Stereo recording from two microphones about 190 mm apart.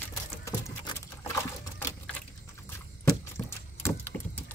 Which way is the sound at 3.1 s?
15° left (ahead or behind).